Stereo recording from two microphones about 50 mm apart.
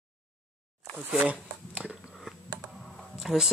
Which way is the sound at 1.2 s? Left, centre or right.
Right.